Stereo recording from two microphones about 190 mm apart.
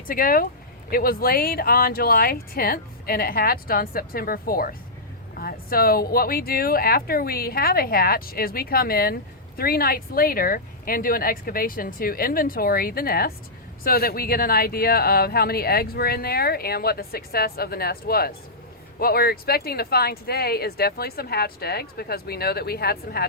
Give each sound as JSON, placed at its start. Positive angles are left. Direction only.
{"t": 0.1, "sound": "speech", "side_deg": 50}